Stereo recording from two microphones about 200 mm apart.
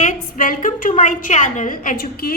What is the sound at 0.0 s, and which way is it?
A woman's voice, 40° left (ahead or behind).